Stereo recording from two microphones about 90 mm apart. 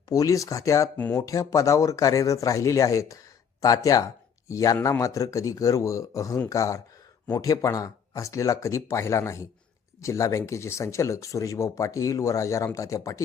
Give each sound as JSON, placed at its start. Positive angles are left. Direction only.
{"t": 0.1, "sound": "speech", "side_deg": 40}
{"t": 0.9, "sound": "speech", "side_deg": 15}
{"t": 1.2, "sound": "speech", "side_deg": 40}